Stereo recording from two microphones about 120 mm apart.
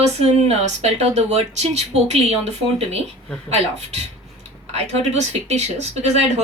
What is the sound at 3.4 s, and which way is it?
Speech, 60° right (ahead or behind).